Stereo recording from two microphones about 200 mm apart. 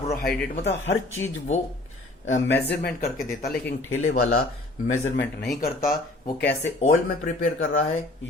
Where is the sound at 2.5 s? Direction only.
55° left (ahead or behind).